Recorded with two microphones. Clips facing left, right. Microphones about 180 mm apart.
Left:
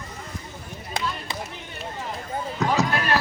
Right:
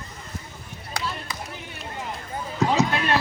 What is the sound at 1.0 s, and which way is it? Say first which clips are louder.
Basketball bounce: left 2 dB; 20° left (ahead or behind).